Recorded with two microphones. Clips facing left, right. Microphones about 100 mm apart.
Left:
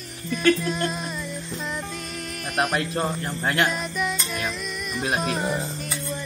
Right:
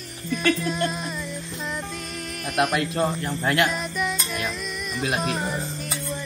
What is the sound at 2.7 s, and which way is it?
Speech, 30° left (ahead or behind).